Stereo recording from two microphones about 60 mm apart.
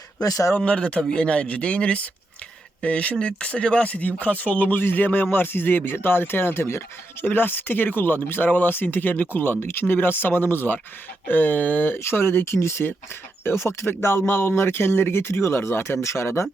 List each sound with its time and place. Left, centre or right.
0.2 s speech: left
0.5 s speech: centre
11.9 s speech: left